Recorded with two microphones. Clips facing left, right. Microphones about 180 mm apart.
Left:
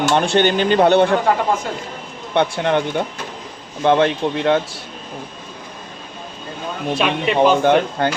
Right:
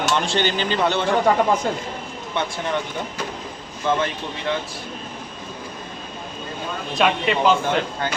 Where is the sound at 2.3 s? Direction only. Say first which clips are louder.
Left 8 dB; 65° left (ahead or behind).